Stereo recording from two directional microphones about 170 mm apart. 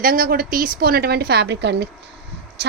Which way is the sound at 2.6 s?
75° right (ahead or behind).